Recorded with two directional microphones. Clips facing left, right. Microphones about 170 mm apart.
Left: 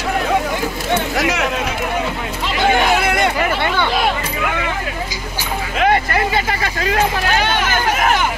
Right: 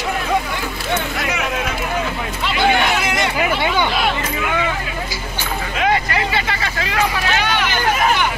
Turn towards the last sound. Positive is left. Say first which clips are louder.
# left 2 dB
turn(degrees=45)  # may be behind; listen again after turning